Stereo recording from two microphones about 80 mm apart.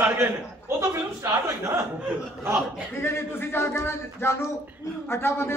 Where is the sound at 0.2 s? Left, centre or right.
Right.